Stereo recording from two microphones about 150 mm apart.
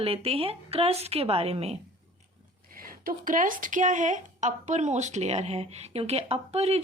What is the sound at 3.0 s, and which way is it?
A woman's voice, 65° right (ahead or behind).